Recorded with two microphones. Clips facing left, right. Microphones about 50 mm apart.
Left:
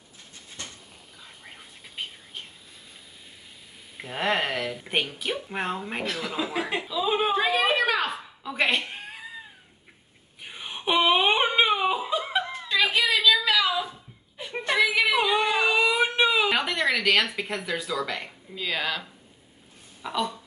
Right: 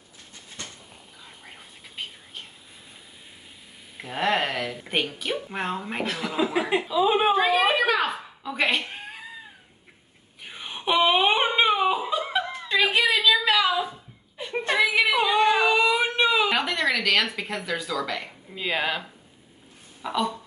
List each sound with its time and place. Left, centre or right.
1.4 s whispering: centre
3.9 s speech: centre
7.3 s cat: centre
10.4 s a sound: centre
12.6 s a sound: right
14.9 s singing: centre
15.1 s a sound: centre
18.5 s speech: right
20.0 s speech: centre